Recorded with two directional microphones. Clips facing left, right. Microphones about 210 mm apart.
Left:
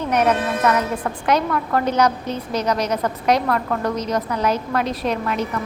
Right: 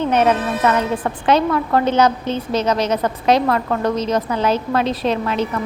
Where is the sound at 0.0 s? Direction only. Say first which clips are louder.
Right 3 dB; 25° right (ahead or behind).